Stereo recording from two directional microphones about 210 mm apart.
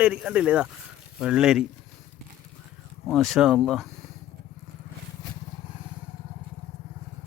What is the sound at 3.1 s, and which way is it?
Speech, centre (ahead or behind).